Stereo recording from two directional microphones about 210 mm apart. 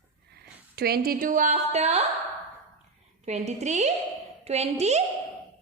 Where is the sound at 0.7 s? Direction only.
45° right (ahead or behind); by 2.0 s 30° right (ahead or behind).